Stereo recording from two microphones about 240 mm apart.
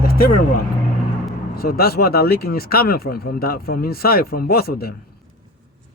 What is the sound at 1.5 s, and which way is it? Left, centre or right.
Speech, left.